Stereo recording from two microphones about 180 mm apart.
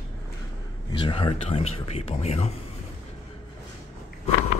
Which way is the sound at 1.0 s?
30° left (ahead or behind).